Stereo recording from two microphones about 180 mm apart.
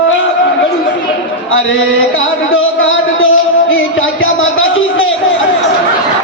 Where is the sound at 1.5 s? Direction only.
90° left.